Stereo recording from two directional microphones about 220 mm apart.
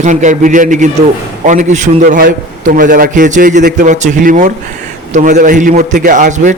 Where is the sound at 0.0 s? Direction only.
35° right (ahead or behind).